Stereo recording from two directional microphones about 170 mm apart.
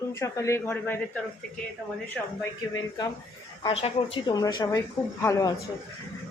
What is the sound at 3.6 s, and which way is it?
Speech, 35° left (ahead or behind).